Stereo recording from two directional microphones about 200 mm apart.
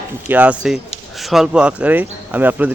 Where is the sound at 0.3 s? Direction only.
10° right (ahead or behind).